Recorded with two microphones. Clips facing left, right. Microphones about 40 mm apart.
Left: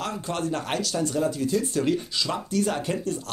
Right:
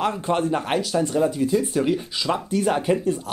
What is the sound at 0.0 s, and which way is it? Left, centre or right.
Speech, right.